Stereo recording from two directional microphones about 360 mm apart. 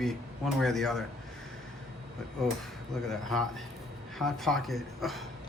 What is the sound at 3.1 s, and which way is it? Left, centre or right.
Speech, centre.